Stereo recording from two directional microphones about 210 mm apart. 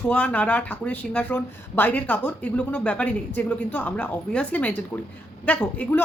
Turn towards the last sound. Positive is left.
turn(degrees=5)  # may be behind; listen again after turning